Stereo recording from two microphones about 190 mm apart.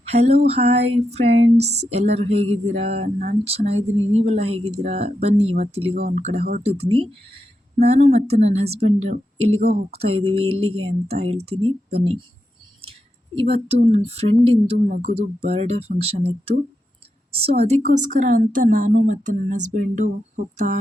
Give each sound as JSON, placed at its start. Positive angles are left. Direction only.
{"t": 0.1, "sound": "a woman's voice", "side_deg": -35}
{"t": 17.3, "sound": "a woman's voice", "side_deg": -30}